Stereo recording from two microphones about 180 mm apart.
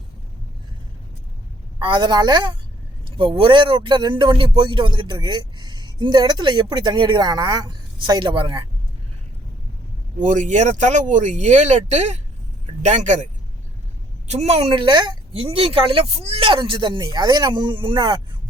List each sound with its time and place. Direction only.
1.8 s speech: 25° right (ahead or behind)
10.2 s speech: 45° right (ahead or behind)
14.3 s speech: 35° right (ahead or behind)